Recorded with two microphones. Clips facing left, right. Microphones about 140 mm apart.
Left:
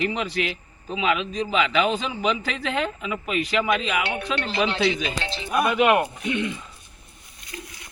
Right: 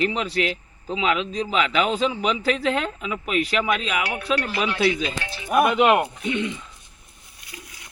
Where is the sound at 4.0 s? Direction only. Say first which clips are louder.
Right 2 dB; 25° left (ahead or behind).